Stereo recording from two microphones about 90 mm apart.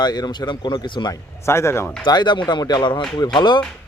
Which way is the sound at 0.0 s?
50° left (ahead or behind).